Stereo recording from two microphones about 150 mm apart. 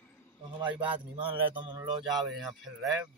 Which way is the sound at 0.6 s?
30° right (ahead or behind).